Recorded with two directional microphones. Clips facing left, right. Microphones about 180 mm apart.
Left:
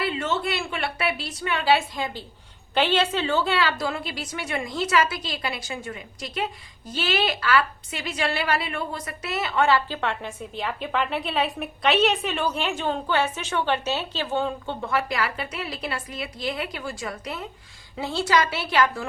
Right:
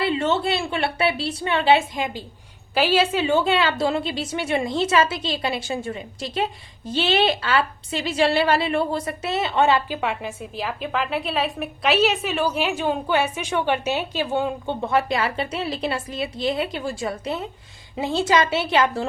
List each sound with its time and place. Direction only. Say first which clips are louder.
0.0 s a woman's voice: right 5 dB; 30° right (ahead or behind)
2.7 s a woman's voice: right 3 dB; 5° right (ahead or behind); by 19.0 s 25° right (ahead or behind)